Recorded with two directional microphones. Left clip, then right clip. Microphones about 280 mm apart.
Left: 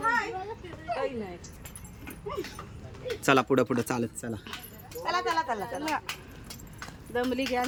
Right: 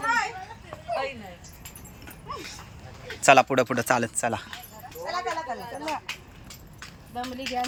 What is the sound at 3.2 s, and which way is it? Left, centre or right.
Speech, centre.